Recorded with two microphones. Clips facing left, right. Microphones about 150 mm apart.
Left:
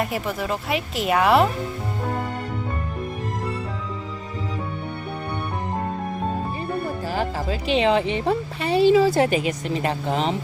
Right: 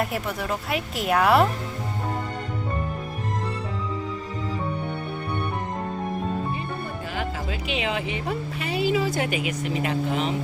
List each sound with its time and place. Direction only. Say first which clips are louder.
0.0 s a woman's voice: left 2 dB; centre (ahead or behind)
7.1 s speech: left 5 dB; 35° left (ahead or behind)